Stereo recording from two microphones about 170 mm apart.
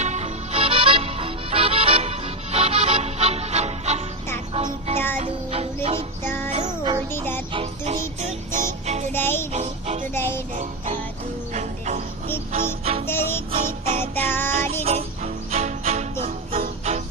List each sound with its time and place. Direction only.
0.0 s music: 40° right (ahead or behind)
6.2 s music: 10° left (ahead or behind)
6.7 s music: 25° right (ahead or behind)
7.9 s music: 45° right (ahead or behind)
9.1 s music: 15° left (ahead or behind)
9.5 s music: 40° right (ahead or behind)
10.2 s music: 15° left (ahead or behind)
10.5 s music: 50° right (ahead or behind)
13.1 s music: 15° left (ahead or behind)
13.7 s music: 45° right (ahead or behind)
14.0 s music: 10° left (ahead or behind)
14.8 s music: 40° right (ahead or behind)